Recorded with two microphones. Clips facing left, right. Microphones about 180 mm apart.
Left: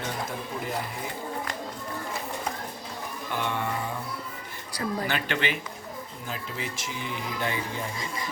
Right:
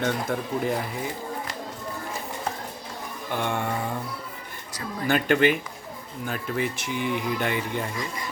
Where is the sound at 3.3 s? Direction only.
50° right (ahead or behind).